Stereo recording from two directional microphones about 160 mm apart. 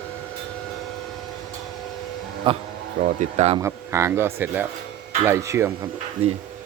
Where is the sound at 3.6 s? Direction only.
15° right (ahead or behind).